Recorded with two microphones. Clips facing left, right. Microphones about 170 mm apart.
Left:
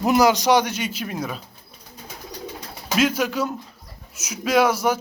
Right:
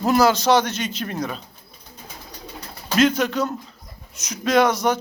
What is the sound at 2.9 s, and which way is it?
Speech, 10° left (ahead or behind).